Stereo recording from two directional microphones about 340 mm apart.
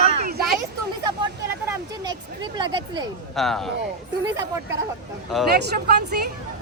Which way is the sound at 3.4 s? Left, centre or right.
Centre.